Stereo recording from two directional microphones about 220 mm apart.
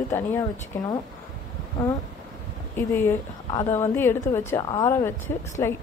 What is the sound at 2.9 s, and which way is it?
A woman's voice, 10° left (ahead or behind).